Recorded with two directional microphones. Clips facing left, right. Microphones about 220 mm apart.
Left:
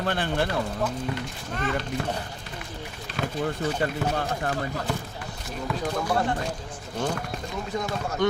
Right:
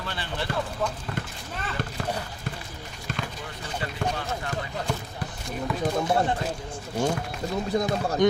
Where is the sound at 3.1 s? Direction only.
45° right (ahead or behind).